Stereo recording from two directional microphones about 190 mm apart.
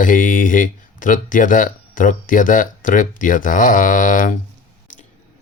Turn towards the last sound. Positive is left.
turn(degrees=45)  # may be behind; listen again after turning